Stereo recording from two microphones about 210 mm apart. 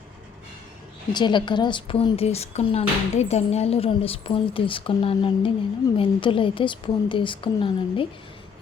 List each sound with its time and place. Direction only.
1.1 s a woman's voice: 20° left (ahead or behind)